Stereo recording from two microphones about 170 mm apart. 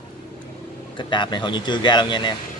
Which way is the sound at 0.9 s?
25° left (ahead or behind).